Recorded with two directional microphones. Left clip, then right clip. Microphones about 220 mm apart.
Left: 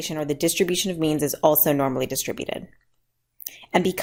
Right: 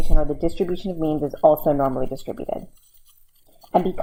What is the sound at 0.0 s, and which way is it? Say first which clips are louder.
A woman's voice: even; 45° left (ahead or behind).